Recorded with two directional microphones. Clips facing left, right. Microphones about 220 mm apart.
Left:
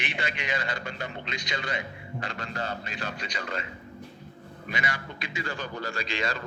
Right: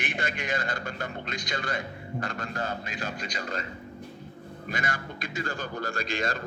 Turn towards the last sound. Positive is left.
turn(degrees=-50)  # may be behind; listen again after turning